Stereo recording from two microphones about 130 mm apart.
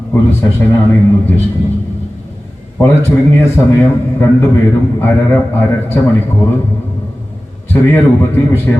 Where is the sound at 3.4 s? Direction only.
15° left (ahead or behind).